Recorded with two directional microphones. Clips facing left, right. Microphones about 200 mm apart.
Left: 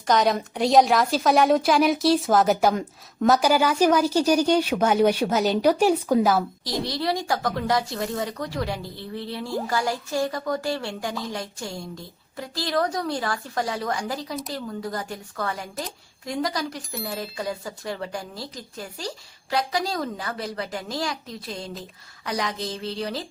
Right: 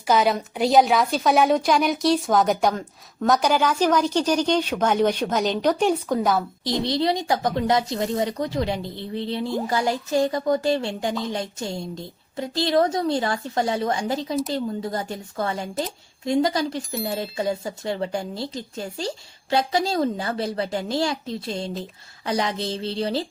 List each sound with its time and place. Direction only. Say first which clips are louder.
0.1 s a woman's voice: right 1 dB; centre (ahead or behind)
6.8 s speech: right 4 dB; 20° right (ahead or behind)
16.9 s a woman's voice: right 5 dB; centre (ahead or behind)
17.2 s speech: right 5 dB; 25° right (ahead or behind)